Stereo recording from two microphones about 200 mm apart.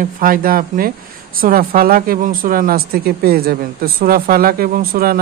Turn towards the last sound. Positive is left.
turn(degrees=-50)  # may be behind; listen again after turning